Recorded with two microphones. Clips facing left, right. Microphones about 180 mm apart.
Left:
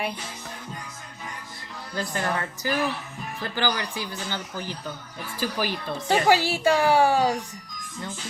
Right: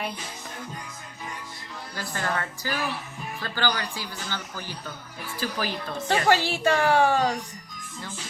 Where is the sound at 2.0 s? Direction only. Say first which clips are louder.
Left 2 dB; 20° left (ahead or behind).